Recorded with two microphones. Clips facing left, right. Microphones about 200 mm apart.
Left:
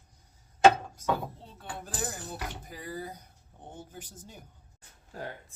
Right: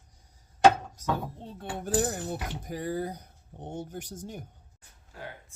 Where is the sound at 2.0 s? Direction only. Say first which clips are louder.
Right 5 dB; 55° right (ahead or behind).